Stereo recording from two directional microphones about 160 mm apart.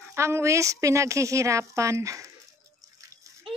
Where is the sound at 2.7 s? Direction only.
20° right (ahead or behind).